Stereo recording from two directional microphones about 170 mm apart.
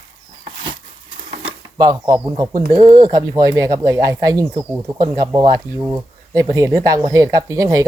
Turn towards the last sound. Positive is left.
turn(degrees=-20)  # may be behind; listen again after turning